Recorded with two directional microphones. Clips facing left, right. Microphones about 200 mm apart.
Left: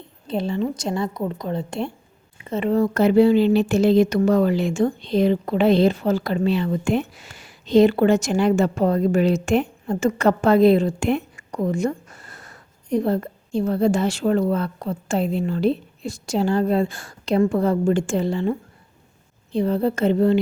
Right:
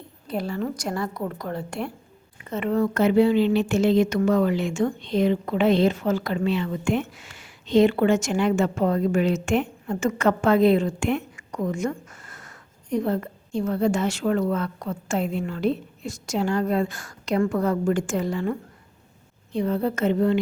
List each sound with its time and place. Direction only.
0.3 s a woman's voice: 25° left (ahead or behind)
19.5 s speech: 30° left (ahead or behind)